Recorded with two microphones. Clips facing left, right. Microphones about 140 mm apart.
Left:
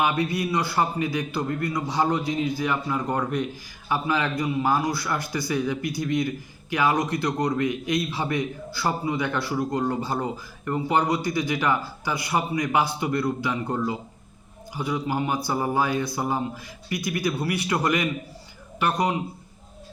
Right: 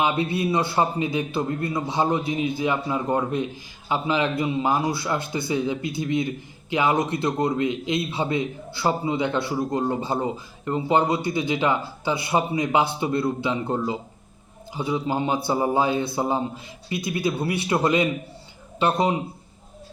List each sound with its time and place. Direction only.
0.0 s a man's voice: 25° right (ahead or behind)